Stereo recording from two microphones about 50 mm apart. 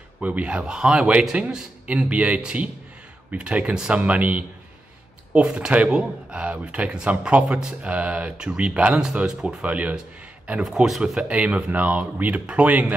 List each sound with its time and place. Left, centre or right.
0.2 s speech: right
3.7 s speech: centre
4.0 s a man's voice: right
10.6 s speech: centre
11.2 s speech: right